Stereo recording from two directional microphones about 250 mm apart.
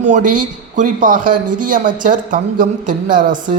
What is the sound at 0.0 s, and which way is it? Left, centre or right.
A man's voice, right.